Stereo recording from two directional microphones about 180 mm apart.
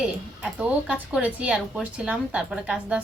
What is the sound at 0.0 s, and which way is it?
Speech, 5° right (ahead or behind).